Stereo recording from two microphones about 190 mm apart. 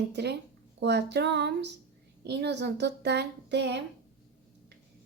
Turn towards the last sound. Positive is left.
turn(degrees=-65)  # may be behind; listen again after turning